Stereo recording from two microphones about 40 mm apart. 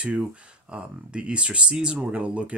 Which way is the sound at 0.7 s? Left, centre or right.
Right.